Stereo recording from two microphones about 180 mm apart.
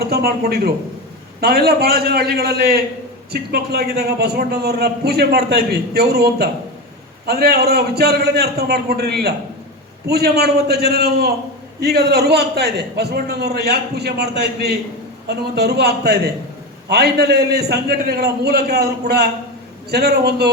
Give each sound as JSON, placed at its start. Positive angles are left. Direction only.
{"t": 0.1, "sound": "a man's voice", "side_deg": -60}